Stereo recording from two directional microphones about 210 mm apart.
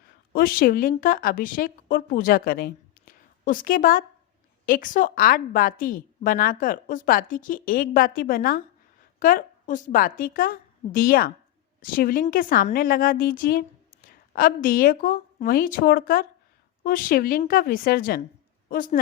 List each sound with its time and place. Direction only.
0.3 s a woman's voice: 45° left (ahead or behind)